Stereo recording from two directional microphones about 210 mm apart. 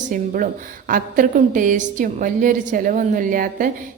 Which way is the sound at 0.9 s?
40° right (ahead or behind).